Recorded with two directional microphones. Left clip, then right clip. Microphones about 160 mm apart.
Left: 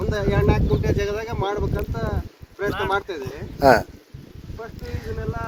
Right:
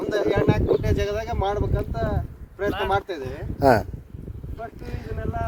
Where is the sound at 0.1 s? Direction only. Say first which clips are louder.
Right 1 dB; 50° right (ahead or behind).